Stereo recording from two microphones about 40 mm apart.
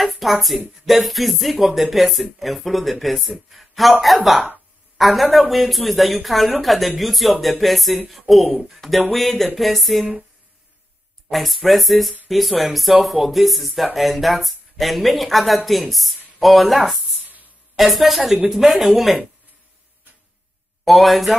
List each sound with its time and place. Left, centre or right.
0.0 s a man's voice: centre
11.2 s speech: centre
20.8 s speech: centre